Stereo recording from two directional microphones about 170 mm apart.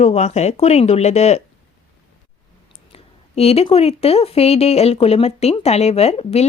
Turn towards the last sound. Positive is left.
turn(degrees=40)  # may be behind; listen again after turning